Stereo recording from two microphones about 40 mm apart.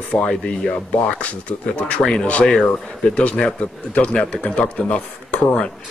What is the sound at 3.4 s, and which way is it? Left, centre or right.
Speech, left.